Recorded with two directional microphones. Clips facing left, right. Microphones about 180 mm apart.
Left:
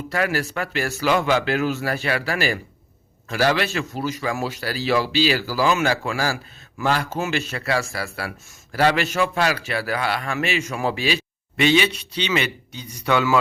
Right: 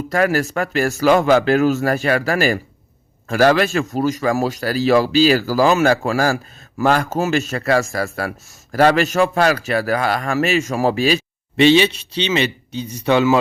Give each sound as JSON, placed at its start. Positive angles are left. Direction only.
{"t": 0.1, "sound": "a man's voice", "side_deg": -45}
{"t": 11.5, "sound": "speech", "side_deg": -25}